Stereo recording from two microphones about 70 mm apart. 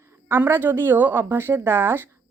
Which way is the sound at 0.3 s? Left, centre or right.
Right.